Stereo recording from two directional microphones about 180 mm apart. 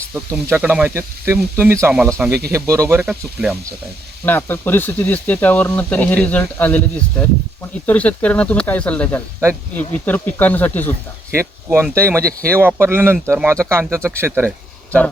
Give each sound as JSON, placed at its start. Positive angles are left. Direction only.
{"t": 0.4, "sound": "speech", "side_deg": -10}
{"t": 4.3, "sound": "speech", "side_deg": 10}
{"t": 11.3, "sound": "speech", "side_deg": -15}